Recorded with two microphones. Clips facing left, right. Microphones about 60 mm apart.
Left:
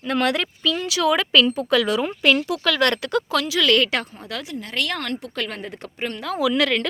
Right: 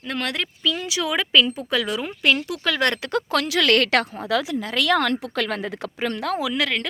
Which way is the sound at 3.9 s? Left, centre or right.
Right.